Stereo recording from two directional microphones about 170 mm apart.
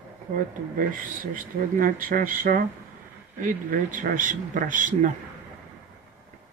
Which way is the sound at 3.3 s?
50° right (ahead or behind).